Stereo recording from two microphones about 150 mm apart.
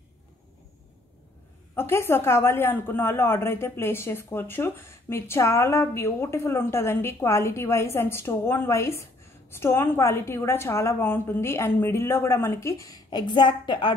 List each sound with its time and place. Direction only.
1.8 s speech: 15° left (ahead or behind)